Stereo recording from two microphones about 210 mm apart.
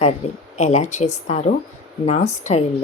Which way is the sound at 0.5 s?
35° left (ahead or behind).